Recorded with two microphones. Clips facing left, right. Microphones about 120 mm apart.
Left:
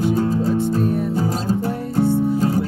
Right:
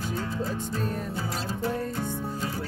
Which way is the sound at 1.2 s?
45° left (ahead or behind).